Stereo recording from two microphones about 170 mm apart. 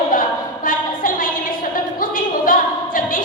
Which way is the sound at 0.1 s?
55° left (ahead or behind).